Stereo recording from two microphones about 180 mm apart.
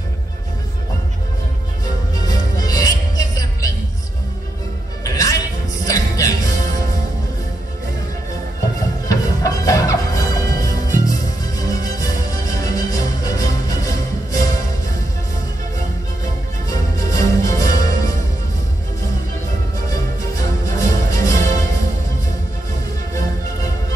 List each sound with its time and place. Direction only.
2.1 s music: 20° left (ahead or behind)
5.0 s music: 20° left (ahead or behind)
9.0 s music: 20° left (ahead or behind)
17.2 s music: 20° left (ahead or behind)
20.6 s music: 20° left (ahead or behind)